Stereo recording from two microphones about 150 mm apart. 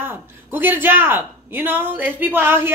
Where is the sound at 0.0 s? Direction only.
15° right (ahead or behind).